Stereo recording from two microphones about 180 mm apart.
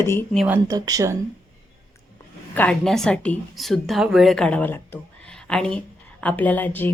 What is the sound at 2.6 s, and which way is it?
A woman's voice, 5° left (ahead or behind).